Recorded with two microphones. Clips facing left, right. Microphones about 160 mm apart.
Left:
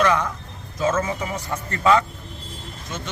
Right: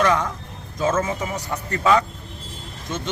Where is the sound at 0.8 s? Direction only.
10° right (ahead or behind).